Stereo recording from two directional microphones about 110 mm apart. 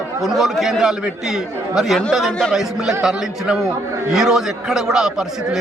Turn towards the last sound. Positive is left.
turn(degrees=-5)  # may be behind; listen again after turning